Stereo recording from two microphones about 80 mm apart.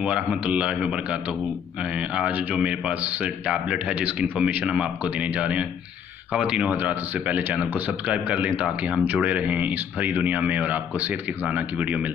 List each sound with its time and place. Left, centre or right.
0.0 s a man's voice: centre